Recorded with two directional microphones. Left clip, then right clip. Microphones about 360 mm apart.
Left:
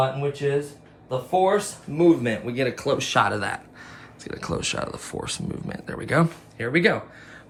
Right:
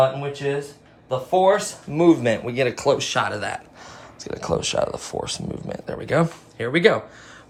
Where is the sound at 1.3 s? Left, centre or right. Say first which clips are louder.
Right 3 dB; right; by 6.9 s centre.